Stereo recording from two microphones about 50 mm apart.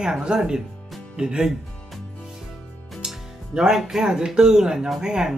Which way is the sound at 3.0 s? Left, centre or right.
Centre.